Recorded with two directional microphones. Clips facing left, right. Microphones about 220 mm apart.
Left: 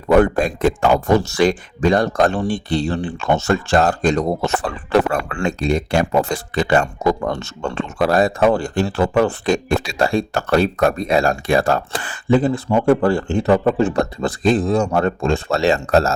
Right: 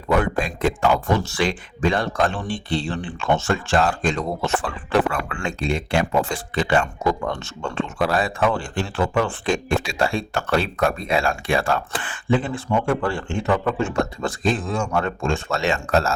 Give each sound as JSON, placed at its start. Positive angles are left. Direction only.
{"t": 0.2, "sound": "speech", "side_deg": 45}